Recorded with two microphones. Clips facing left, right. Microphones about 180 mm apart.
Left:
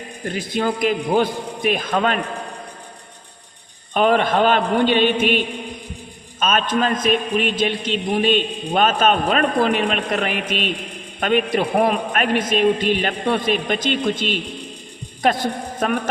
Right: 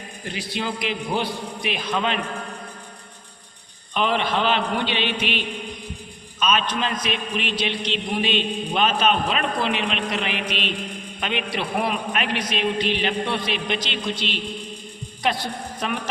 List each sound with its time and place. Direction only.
0.3 s a man's voice: 50° left (ahead or behind)
3.9 s a man's voice: 45° left (ahead or behind)